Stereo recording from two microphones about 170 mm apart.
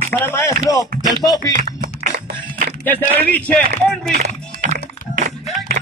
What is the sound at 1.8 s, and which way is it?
Music, 55° right (ahead or behind).